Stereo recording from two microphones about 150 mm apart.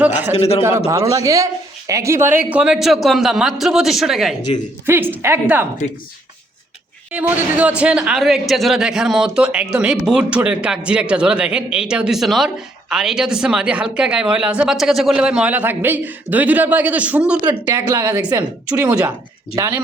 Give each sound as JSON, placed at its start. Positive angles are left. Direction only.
{"t": 0.0, "sound": "a man's voice", "side_deg": -10}
{"t": 0.3, "sound": "speech", "side_deg": 45}
{"t": 0.9, "sound": "a man's voice", "side_deg": -20}
{"t": 4.9, "sound": "a man's voice", "side_deg": -15}
{"t": 7.1, "sound": "a man's voice", "side_deg": -10}
{"t": 17.7, "sound": "a man's voice", "side_deg": -20}
{"t": 18.7, "sound": "a man's voice", "side_deg": -10}